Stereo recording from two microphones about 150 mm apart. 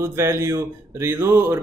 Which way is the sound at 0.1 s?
20° right (ahead or behind).